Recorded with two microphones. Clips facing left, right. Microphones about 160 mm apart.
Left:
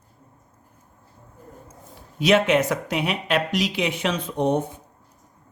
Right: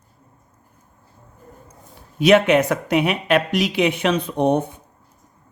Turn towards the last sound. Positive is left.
turn(degrees=-60)  # may be behind; listen again after turning